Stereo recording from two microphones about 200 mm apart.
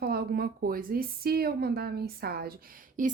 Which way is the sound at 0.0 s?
50° right (ahead or behind).